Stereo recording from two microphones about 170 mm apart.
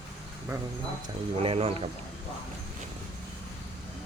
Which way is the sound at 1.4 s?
35° right (ahead or behind).